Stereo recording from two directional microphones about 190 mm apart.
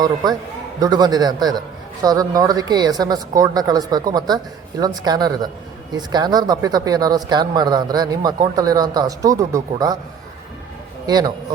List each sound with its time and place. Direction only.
0.8 s a man's voice: 20° right (ahead or behind)
11.0 s a man's voice: 20° right (ahead or behind)